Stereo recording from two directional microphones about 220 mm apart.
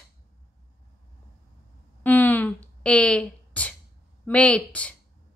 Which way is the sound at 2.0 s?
10° left (ahead or behind).